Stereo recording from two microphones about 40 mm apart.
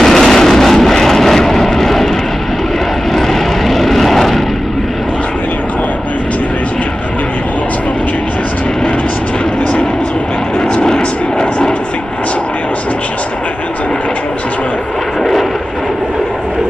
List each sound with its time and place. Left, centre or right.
0.0 s vehicle: centre
3.2 s vehicle: centre
10.7 s vehicle: left